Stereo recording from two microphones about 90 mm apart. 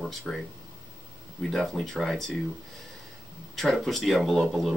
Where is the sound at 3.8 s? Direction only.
Centre (ahead or behind).